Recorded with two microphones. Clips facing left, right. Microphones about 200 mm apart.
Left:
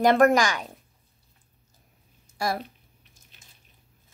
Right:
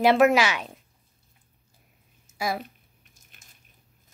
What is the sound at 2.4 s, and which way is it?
Speech, 5° right (ahead or behind).